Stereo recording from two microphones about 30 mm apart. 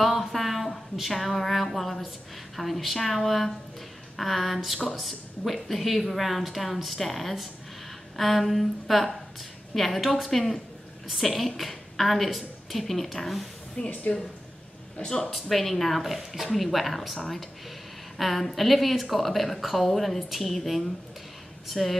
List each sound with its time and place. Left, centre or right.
0.0 s a sound: centre
0.3 s a woman's voice: centre
13.8 s speech: left
15.0 s speech: left
15.5 s a woman's voice: centre
16.5 s a woman's voice: centre